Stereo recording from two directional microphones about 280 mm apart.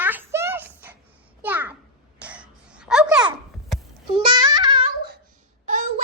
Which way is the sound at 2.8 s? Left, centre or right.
Centre.